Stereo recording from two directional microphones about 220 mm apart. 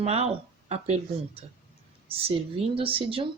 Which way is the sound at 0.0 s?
30° right (ahead or behind).